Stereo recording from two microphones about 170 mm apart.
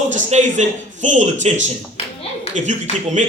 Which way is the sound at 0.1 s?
45° right (ahead or behind).